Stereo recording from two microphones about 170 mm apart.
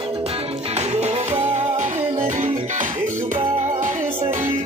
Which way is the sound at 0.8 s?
40° right (ahead or behind).